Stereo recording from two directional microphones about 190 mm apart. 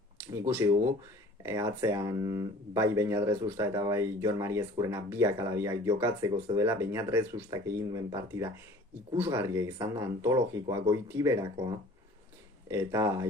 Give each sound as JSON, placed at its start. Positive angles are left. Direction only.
{"t": 0.4, "sound": "speech", "side_deg": -10}
{"t": 12.6, "sound": "speech", "side_deg": -15}